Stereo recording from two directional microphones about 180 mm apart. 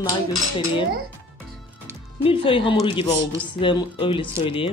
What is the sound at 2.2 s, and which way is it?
Speech, 30° left (ahead or behind).